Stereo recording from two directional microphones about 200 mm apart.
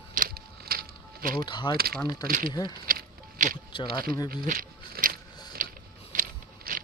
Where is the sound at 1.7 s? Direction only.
50° right (ahead or behind).